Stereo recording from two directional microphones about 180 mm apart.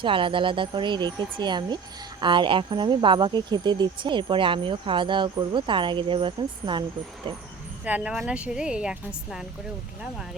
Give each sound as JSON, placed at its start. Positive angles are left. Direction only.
{"t": 0.0, "sound": "speech", "side_deg": -30}
{"t": 7.9, "sound": "a woman's voice", "side_deg": -5}